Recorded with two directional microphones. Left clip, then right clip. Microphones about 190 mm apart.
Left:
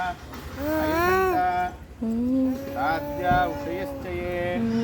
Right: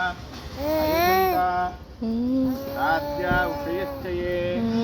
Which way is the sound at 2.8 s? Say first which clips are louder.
Right 2 dB; 50° left (ahead or behind).